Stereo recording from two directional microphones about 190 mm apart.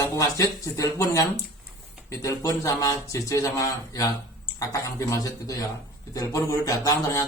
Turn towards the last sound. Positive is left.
turn(degrees=20)  # may be behind; listen again after turning